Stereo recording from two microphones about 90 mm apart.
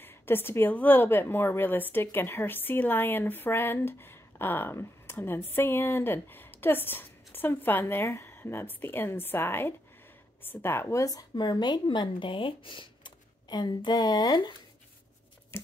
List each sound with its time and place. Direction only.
0.0 s a woman's voice: 25° left (ahead or behind)
11.1 s speech: 50° left (ahead or behind)
15.5 s a sound: 30° left (ahead or behind)